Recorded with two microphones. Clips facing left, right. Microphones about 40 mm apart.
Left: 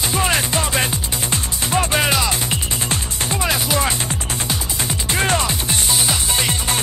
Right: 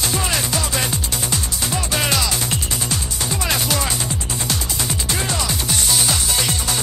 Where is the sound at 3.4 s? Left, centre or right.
Centre.